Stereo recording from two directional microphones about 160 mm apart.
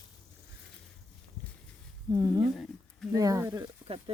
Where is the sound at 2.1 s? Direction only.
25° right (ahead or behind).